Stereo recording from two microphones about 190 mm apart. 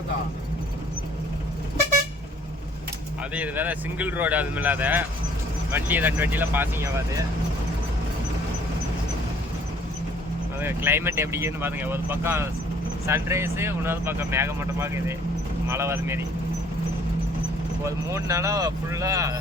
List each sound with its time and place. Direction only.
3.3 s speech: 10° right (ahead or behind)
10.6 s speech: 10° right (ahead or behind)
17.8 s speech: 15° right (ahead or behind)